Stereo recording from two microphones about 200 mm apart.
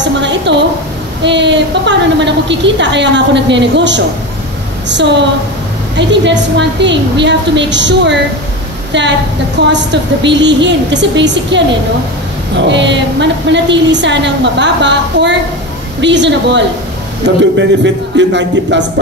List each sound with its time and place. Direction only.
0.0 s a sound: 60° right (ahead or behind)
1.2 s a woman's voice: 60° right (ahead or behind)
9.7 s a woman's voice: 60° right (ahead or behind)